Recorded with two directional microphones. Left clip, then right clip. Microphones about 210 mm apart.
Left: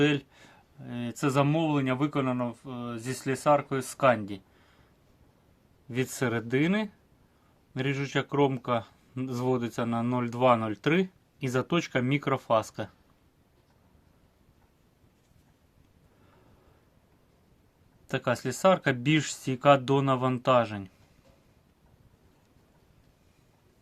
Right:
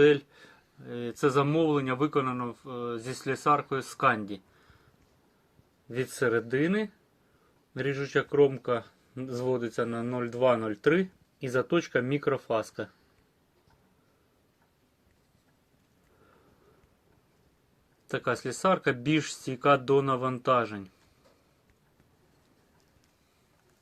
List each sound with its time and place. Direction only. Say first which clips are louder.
0.0 s speech: right 5 dB; 55° left (ahead or behind)
5.9 s speech: right 2 dB; 55° left (ahead or behind)
18.1 s speech: left 1 dB; 55° left (ahead or behind)